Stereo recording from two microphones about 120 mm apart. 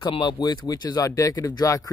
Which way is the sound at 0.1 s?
40° left (ahead or behind).